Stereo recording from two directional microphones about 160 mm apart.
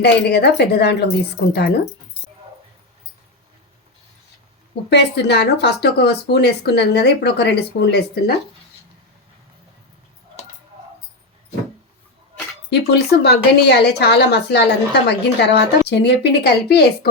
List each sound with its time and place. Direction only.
0.0 s a woman's voice: 90° left
4.9 s a woman's voice: 90° left
10.4 s a sound: 40° left (ahead or behind)
12.7 s a woman's voice: 90° left